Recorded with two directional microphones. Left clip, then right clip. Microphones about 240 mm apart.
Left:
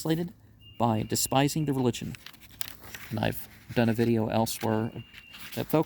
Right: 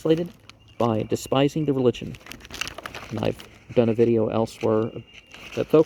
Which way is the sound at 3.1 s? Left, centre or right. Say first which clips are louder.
Right 4 dB; left.